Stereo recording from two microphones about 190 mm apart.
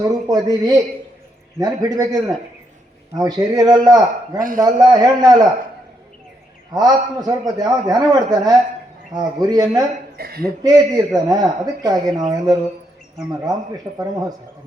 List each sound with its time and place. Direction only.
0.0 s speech: 20° right (ahead or behind)
4.4 s a man's voice: 45° right (ahead or behind)
4.6 s speech: 20° right (ahead or behind)
6.7 s speech: 20° right (ahead or behind)
10.2 s chuckle: 55° right (ahead or behind)
10.6 s speech: 20° right (ahead or behind)
13.9 s speech: 20° right (ahead or behind)